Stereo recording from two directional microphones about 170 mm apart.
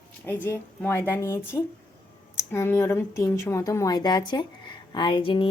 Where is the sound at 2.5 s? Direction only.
15° left (ahead or behind).